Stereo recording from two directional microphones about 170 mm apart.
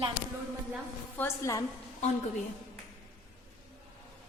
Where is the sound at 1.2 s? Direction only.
20° left (ahead or behind).